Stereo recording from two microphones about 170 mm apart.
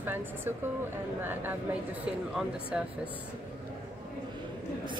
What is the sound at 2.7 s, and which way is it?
Speech, 5° right (ahead or behind).